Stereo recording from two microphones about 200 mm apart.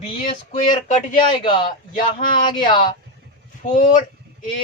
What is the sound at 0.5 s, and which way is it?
Speech, 40° left (ahead or behind).